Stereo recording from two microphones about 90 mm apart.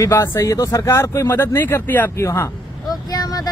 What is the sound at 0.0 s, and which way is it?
Speech, 35° left (ahead or behind).